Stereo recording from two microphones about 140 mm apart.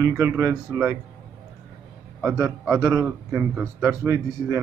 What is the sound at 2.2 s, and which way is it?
Speech, 25° right (ahead or behind).